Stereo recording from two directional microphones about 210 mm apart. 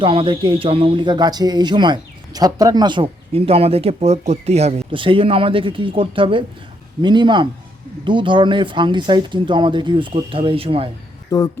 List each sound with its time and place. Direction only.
0.0 s speech: 25° right (ahead or behind)
11.3 s speech: 15° left (ahead or behind)